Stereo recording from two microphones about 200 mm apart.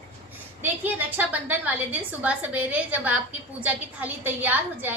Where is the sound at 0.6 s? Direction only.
10° right (ahead or behind).